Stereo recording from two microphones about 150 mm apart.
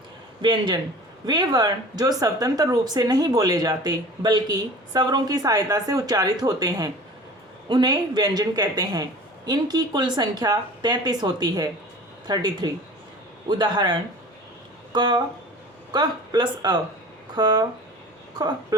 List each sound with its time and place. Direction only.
0.4 s speech: 30° right (ahead or behind)